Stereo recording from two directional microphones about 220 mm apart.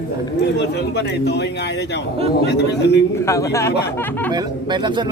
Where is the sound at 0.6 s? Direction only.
50° left (ahead or behind).